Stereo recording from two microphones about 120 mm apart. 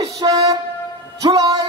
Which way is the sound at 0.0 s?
30° right (ahead or behind).